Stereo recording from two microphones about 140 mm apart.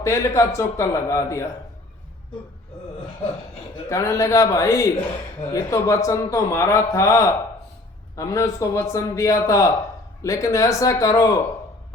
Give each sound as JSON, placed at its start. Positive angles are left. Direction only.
{"t": 0.0, "sound": "a man's voice", "side_deg": 20}
{"t": 3.8, "sound": "a man's voice", "side_deg": 20}